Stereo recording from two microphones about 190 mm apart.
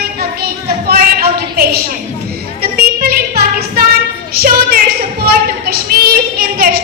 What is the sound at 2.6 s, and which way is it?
Music, 55° right (ahead or behind).